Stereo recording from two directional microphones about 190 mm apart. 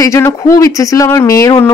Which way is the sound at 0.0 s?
15° left (ahead or behind).